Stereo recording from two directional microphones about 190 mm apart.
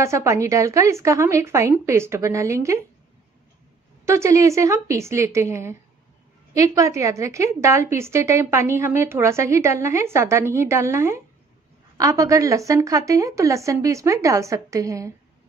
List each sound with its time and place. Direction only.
0.0 s a woman's voice: 15° right (ahead or behind)
4.0 s a woman's voice: 15° right (ahead or behind)